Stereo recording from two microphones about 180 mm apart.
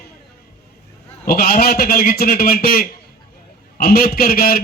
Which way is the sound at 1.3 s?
55° left (ahead or behind).